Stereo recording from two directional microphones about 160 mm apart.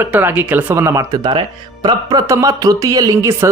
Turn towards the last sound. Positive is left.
turn(degrees=-15)  # may be behind; listen again after turning